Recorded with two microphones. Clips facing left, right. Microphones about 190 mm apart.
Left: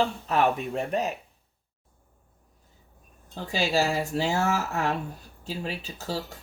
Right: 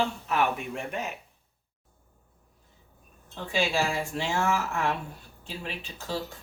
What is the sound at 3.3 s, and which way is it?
Speech, 40° left (ahead or behind).